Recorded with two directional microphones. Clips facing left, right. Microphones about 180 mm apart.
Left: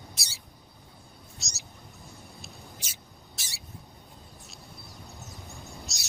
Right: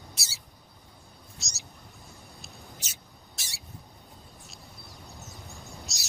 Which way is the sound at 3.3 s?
Centre (ahead or behind).